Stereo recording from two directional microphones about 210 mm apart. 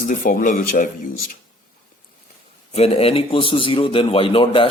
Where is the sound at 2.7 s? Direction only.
30° left (ahead or behind).